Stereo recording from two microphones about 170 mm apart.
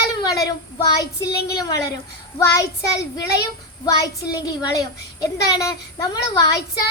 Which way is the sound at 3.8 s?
20° left (ahead or behind).